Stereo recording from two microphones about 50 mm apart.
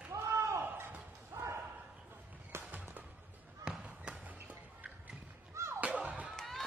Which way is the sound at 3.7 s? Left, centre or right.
Centre.